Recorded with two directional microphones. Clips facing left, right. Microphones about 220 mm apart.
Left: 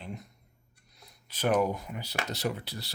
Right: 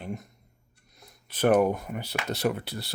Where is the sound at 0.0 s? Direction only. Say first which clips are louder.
Right 5 dB; 45° right (ahead or behind).